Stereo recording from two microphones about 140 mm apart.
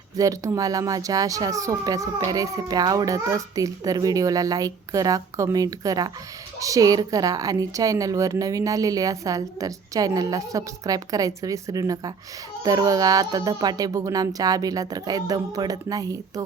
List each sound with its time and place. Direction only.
0.2 s speech: 25° right (ahead or behind)